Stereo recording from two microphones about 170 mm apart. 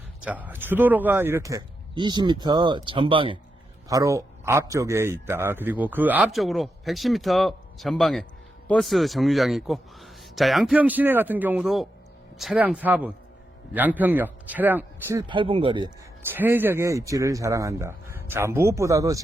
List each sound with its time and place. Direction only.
0.2 s speech: 10° right (ahead or behind); by 3.3 s 30° right (ahead or behind)
3.8 s a man's voice: 20° right (ahead or behind)
15.3 s speech: 30° right (ahead or behind)
16.3 s a man's voice: 10° right (ahead or behind)